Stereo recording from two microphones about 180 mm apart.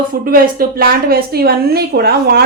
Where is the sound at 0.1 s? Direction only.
55° right (ahead or behind).